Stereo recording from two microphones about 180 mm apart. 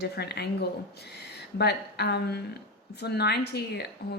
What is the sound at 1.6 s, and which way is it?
A woman's voice, 65° left (ahead or behind).